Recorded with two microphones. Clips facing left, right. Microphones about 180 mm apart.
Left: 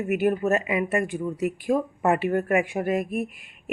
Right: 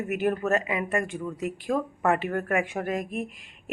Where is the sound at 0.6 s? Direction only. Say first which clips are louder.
Left 3 dB; 10° left (ahead or behind).